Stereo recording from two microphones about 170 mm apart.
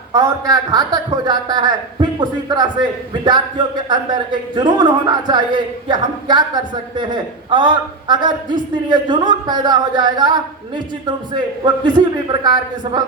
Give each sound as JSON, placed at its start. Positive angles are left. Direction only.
{"t": 0.1, "sound": "a man's voice", "side_deg": -20}
{"t": 11.6, "sound": "a man's voice", "side_deg": -25}